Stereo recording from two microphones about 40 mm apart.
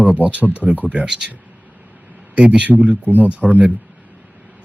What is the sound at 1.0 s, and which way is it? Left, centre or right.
Speech, centre.